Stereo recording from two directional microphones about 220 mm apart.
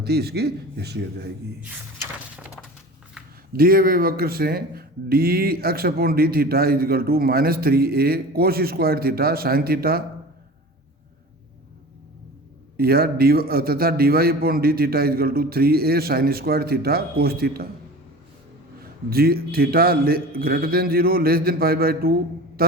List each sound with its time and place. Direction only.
0.0 s speech: 45° right (ahead or behind)
1.6 s a sound: 5° right (ahead or behind)
3.5 s speech: 40° right (ahead or behind)
12.7 s speech: 45° right (ahead or behind)
18.8 s speech: 45° right (ahead or behind)